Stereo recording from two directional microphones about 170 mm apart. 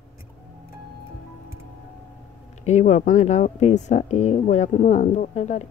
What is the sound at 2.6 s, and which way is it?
Speech, 40° left (ahead or behind).